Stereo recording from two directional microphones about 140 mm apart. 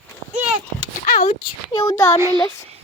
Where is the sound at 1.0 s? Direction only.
90° left.